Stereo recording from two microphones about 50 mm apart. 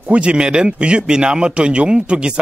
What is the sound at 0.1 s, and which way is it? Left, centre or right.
A man's voice, right.